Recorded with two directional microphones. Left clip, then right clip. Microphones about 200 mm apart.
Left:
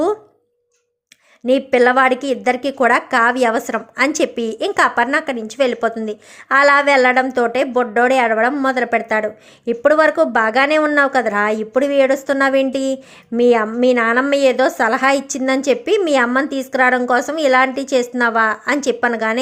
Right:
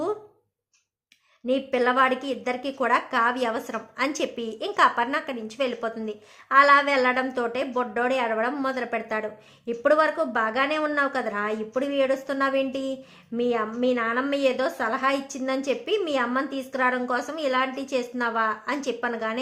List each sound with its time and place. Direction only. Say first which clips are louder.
1.5 s speech: left 10 dB; 30° left (ahead or behind)